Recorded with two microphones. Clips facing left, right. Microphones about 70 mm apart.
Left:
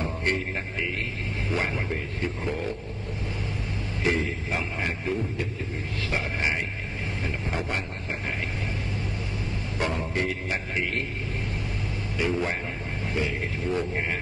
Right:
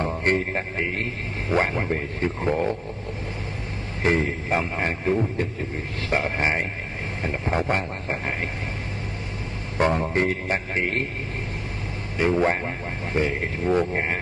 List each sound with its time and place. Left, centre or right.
0.0 s a man's voice: right
4.0 s speech: right
9.8 s speech: right
12.2 s speech: right